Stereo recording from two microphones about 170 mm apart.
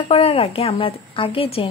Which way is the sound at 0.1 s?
35° left (ahead or behind).